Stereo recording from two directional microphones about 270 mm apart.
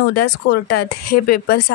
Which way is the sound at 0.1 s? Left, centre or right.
Left.